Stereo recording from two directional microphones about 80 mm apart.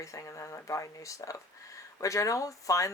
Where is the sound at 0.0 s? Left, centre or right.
Left.